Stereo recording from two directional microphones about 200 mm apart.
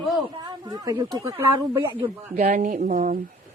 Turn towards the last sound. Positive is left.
turn(degrees=-40)  # may be behind; listen again after turning